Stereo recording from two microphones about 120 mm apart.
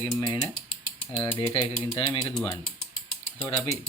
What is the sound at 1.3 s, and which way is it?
Speech, 45° left (ahead or behind).